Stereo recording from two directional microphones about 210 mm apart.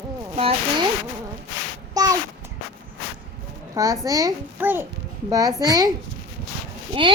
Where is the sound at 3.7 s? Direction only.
15° right (ahead or behind).